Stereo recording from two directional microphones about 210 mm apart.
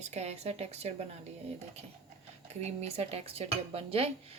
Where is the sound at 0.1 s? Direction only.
30° right (ahead or behind).